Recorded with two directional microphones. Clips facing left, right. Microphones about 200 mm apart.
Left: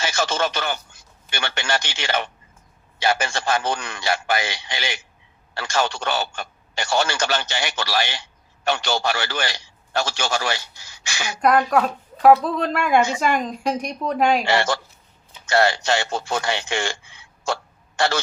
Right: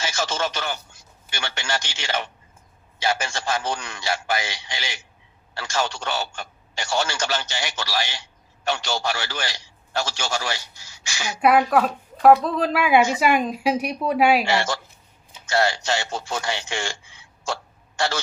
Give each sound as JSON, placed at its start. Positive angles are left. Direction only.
{"t": 0.0, "sound": "a man's voice", "side_deg": 60}
{"t": 11.3, "sound": "speech", "side_deg": -5}
{"t": 14.4, "sound": "speech", "side_deg": 60}